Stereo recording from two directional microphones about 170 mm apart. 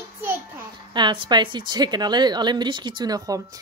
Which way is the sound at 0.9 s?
25° right (ahead or behind).